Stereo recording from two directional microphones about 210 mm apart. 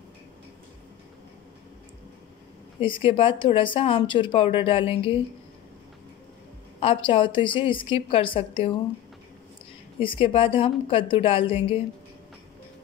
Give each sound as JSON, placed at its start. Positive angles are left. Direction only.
{"t": 2.8, "sound": "speech", "side_deg": 25}
{"t": 6.8, "sound": "speech", "side_deg": 25}
{"t": 9.9, "sound": "speech", "side_deg": 25}